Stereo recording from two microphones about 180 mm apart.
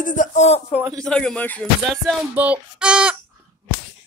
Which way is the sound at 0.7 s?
Centre (ahead or behind).